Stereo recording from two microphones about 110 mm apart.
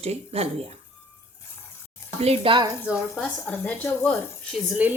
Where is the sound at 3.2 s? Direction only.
15° left (ahead or behind).